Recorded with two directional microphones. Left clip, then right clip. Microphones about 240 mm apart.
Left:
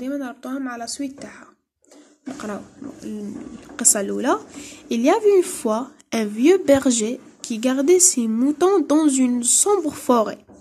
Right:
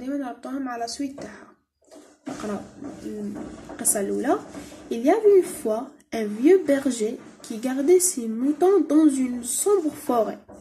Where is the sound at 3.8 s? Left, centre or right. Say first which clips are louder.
Left 4 dB; left.